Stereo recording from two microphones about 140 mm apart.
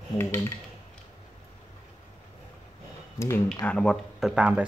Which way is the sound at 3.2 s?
20° left (ahead or behind).